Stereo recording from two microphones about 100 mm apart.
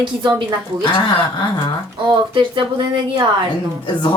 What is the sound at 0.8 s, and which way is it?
Speech, 45° left (ahead or behind).